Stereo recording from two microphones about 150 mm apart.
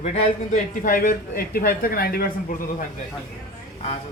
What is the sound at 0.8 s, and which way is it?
Speech, 70° left (ahead or behind).